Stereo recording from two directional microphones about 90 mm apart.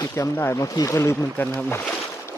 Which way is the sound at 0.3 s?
25° left (ahead or behind).